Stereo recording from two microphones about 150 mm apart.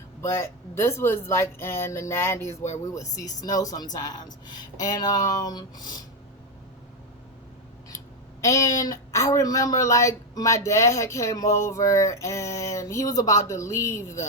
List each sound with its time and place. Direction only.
0.2 s speech: 15° left (ahead or behind)
7.9 s speech: 20° left (ahead or behind)